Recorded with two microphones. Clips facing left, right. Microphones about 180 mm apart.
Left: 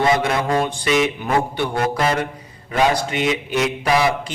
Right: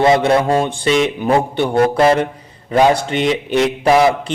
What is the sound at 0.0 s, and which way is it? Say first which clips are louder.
A man's voice: right 6 dB; 30° right (ahead or behind).